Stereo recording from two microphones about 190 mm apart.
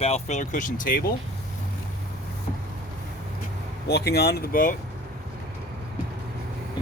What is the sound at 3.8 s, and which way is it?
Speech, 60° left (ahead or behind).